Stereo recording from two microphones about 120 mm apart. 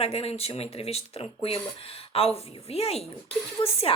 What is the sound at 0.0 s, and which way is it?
A woman's voice, 55° left (ahead or behind).